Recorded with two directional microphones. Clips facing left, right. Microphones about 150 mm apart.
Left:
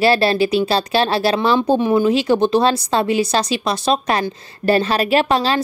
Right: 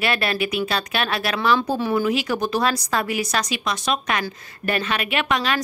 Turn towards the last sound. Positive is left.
turn(degrees=30)  # may be behind; listen again after turning